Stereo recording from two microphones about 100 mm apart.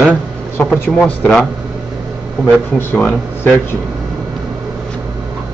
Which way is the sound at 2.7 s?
20° left (ahead or behind).